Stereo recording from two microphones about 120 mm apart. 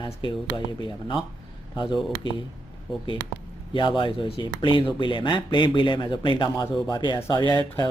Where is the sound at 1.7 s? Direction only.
40° left (ahead or behind).